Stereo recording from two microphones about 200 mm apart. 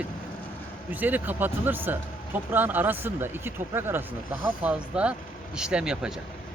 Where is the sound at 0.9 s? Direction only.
10° right (ahead or behind).